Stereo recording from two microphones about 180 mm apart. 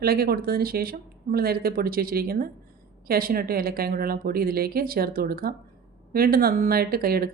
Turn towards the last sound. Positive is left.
turn(degrees=-55)  # may be behind; listen again after turning